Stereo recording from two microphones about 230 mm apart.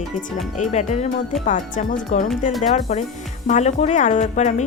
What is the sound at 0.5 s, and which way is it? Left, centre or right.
A woman's voice, left.